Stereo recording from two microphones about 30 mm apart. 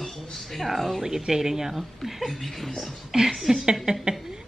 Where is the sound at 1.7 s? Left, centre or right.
Centre.